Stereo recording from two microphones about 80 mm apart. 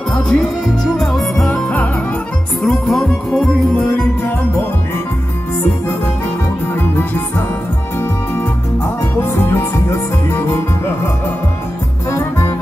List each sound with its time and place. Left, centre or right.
0.3 s music: centre
0.9 s music: centre
9.4 s music: left
12.1 s music: left